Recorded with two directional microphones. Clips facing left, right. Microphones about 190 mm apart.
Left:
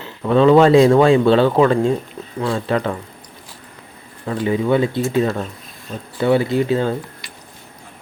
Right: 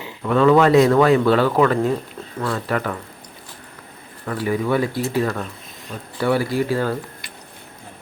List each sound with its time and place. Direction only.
0.3 s speech: 30° left (ahead or behind)
4.3 s speech: 20° left (ahead or behind)